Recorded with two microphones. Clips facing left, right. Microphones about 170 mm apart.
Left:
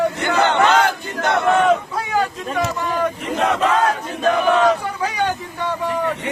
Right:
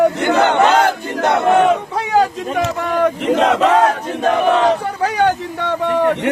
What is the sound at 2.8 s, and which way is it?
Speech, 60° right (ahead or behind).